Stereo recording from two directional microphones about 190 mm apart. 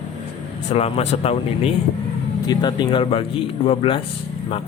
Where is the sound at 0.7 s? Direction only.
30° left (ahead or behind).